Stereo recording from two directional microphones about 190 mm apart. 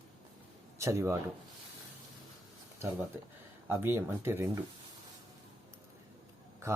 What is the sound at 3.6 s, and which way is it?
Speech, 10° right (ahead or behind).